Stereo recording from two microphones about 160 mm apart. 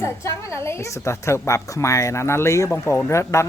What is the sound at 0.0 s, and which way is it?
A woman's voice, 20° left (ahead or behind).